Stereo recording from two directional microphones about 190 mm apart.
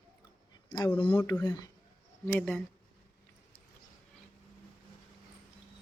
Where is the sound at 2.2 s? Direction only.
10° left (ahead or behind).